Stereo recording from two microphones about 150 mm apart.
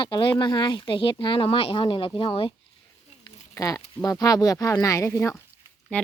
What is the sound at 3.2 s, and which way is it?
Speech, 20° left (ahead or behind).